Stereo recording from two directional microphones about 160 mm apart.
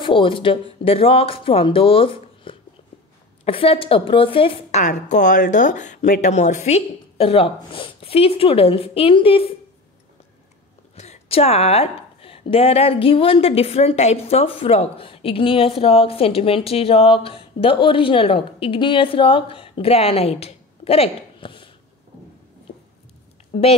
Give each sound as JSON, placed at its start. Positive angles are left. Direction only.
{"t": 0.0, "sound": "a woman's voice", "side_deg": 30}
{"t": 11.0, "sound": "a woman's voice", "side_deg": 40}
{"t": 23.5, "sound": "a woman's voice", "side_deg": 45}